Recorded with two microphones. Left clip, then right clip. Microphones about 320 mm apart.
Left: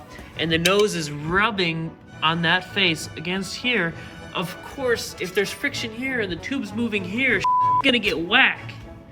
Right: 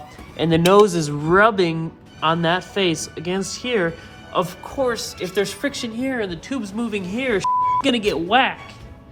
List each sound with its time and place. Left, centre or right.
0.3 s speech: centre
1.2 s speech: centre